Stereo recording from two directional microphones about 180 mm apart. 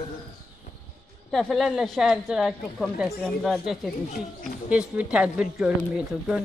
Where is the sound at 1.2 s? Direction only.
Centre (ahead or behind).